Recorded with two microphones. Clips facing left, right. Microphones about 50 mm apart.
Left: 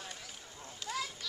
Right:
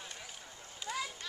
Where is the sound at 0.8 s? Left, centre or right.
Centre.